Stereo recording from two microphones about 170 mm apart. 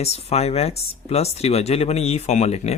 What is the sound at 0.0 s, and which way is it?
Speech, 40° left (ahead or behind).